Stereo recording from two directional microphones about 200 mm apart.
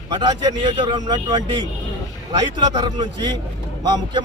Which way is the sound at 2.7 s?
20° right (ahead or behind).